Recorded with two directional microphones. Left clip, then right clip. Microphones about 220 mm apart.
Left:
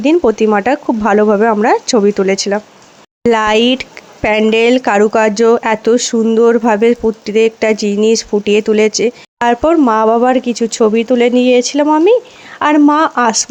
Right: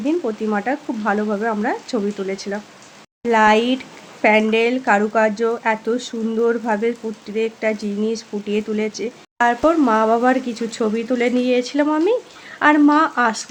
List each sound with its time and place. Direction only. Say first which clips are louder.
0.0 s speech: left 11 dB; 40° left (ahead or behind)